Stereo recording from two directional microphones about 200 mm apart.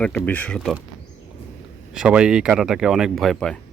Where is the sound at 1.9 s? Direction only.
5° right (ahead or behind).